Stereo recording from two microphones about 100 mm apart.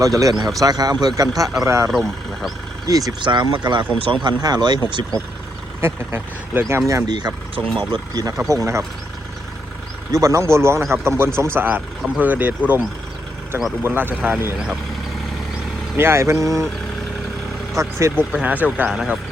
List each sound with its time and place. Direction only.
0.0 s speech: 35° right (ahead or behind)
1.6 s speech: 30° right (ahead or behind)
1.9 s speech: centre (ahead or behind)
2.8 s speech: 35° right (ahead or behind)
3.2 s speech: 50° right (ahead or behind)
5.8 s speech: 25° right (ahead or behind)
7.1 s speech: 45° right (ahead or behind)
10.1 s speech: 35° right (ahead or behind); by 12.8 s 15° right (ahead or behind)
13.8 s speech: 20° right (ahead or behind)
16.0 s speech: 25° right (ahead or behind)
17.7 s speech: 30° right (ahead or behind)
18.4 s speech: 15° right (ahead or behind)